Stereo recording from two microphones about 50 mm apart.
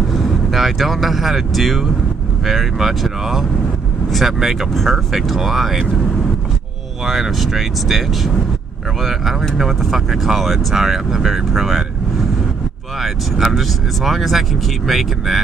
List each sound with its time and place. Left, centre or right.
0.1 s speech: centre
7.1 s speech: centre
13.0 s speech: centre